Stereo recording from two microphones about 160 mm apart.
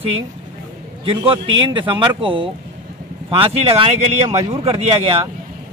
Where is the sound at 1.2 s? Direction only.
30° right (ahead or behind).